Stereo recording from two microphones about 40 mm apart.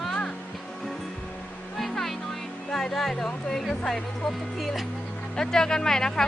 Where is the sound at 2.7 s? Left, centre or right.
Centre.